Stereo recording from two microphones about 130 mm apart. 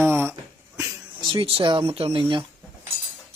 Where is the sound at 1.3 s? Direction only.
40° right (ahead or behind).